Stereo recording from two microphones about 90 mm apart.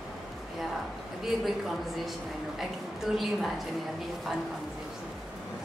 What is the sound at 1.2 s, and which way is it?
Speech, centre (ahead or behind).